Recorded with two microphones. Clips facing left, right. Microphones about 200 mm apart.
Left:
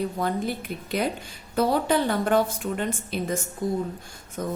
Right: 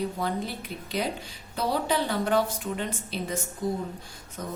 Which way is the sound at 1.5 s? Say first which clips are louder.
Left 5 dB; 50° left (ahead or behind).